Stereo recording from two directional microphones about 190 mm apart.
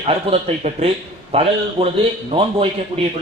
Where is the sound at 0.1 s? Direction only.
35° right (ahead or behind).